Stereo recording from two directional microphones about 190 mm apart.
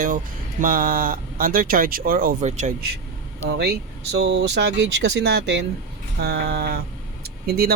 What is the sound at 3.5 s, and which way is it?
Speech, 60° right (ahead or behind).